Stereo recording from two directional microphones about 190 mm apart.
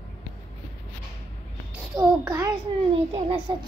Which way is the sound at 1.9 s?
20° right (ahead or behind).